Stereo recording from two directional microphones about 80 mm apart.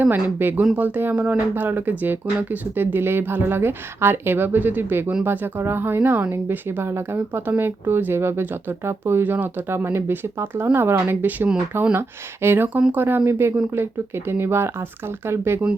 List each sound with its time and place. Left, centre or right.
0.0 s speech: right
12.7 s speech: centre